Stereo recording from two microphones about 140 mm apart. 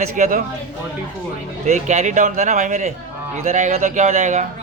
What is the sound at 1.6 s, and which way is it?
Speech, 60° right (ahead or behind).